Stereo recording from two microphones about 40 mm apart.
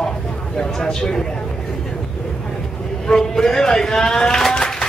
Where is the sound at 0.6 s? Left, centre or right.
Centre.